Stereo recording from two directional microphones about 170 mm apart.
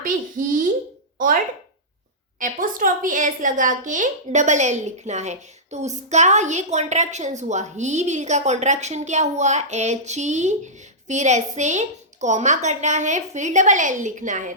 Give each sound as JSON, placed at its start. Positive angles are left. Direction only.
{"t": 0.0, "sound": "a sound", "side_deg": -50}
{"t": 1.2, "sound": "speech", "side_deg": -50}
{"t": 2.4, "sound": "a woman's voice", "side_deg": -55}